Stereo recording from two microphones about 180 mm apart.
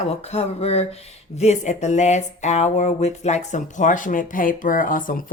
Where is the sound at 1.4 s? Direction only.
40° left (ahead or behind).